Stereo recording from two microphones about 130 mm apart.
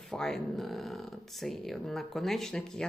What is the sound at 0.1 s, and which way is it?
Speech, 5° left (ahead or behind).